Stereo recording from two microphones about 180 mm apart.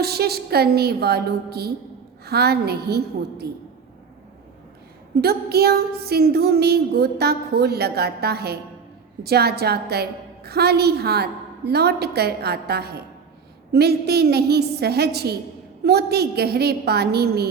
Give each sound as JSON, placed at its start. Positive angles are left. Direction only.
{"t": 0.0, "sound": "a woman's voice", "side_deg": -60}
{"t": 5.2, "sound": "a woman's voice", "side_deg": -60}